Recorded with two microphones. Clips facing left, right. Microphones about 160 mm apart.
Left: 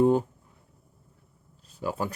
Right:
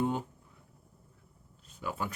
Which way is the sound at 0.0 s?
40° left (ahead or behind).